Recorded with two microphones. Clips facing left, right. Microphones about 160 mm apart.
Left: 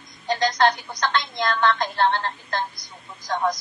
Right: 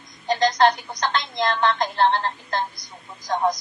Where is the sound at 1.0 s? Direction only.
25° right (ahead or behind).